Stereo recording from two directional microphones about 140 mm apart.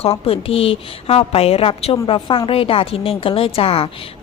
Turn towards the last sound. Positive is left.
turn(degrees=40)  # may be behind; listen again after turning